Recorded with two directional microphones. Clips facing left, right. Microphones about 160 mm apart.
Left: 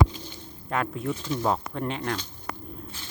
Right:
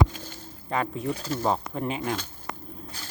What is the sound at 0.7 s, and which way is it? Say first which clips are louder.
Speech: even; centre (ahead or behind).